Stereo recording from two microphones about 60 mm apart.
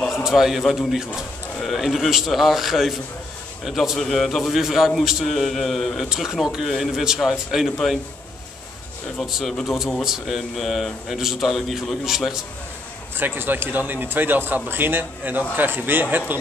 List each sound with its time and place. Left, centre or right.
0.1 s speech: centre
6.0 s speech: centre
9.2 s speech: centre
13.2 s a man's voice: right